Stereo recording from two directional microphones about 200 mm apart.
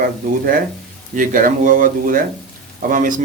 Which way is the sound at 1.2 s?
40° right (ahead or behind).